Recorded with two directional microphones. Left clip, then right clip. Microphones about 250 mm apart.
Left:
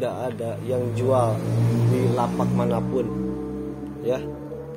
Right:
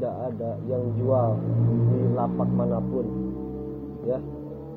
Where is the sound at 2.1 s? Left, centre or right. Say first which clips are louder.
Left 3 dB; left.